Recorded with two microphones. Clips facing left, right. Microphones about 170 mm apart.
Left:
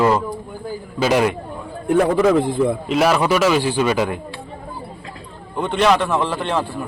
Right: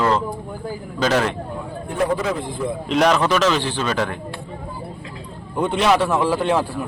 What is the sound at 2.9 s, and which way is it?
A man's voice, 5° left (ahead or behind).